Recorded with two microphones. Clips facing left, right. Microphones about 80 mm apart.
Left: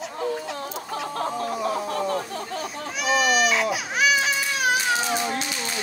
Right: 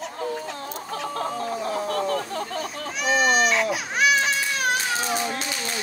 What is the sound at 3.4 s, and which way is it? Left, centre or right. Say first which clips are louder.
Baby cry: even; centre.